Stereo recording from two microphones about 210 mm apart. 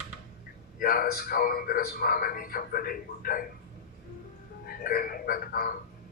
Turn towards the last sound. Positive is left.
turn(degrees=45)  # may be behind; listen again after turning